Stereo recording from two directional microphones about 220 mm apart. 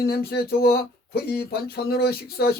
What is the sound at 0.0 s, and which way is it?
Speech, 45° left (ahead or behind).